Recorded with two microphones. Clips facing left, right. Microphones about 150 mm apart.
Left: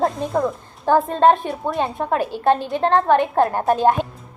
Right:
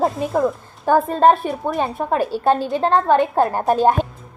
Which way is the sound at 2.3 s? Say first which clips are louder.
Even; 20° left (ahead or behind).